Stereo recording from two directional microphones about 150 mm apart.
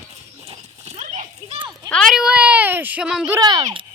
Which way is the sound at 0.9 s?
55° right (ahead or behind).